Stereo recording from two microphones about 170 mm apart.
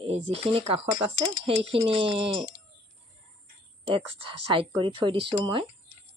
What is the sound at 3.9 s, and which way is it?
Speech, 30° right (ahead or behind).